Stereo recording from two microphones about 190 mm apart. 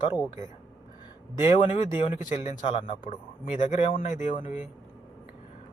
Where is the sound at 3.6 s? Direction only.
40° left (ahead or behind).